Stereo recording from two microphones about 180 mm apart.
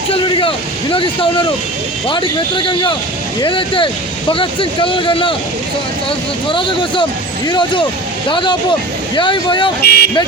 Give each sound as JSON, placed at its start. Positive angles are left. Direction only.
{"t": 0.1, "sound": "speech", "side_deg": 30}
{"t": 9.8, "sound": "speech", "side_deg": 60}